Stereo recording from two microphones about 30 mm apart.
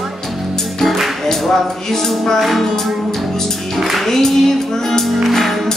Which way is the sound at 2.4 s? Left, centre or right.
Centre.